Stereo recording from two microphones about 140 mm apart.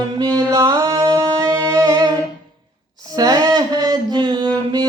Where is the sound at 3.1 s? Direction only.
25° right (ahead or behind).